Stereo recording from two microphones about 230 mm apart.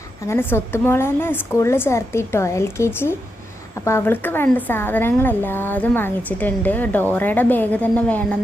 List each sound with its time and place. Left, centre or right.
0.3 s speech: centre